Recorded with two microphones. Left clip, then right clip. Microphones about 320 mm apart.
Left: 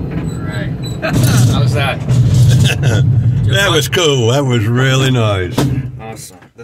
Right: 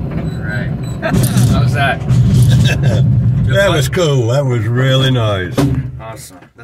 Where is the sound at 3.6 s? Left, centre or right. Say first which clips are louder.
Left 1 dB; left.